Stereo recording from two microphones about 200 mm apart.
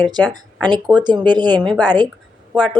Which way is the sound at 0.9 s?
20° right (ahead or behind).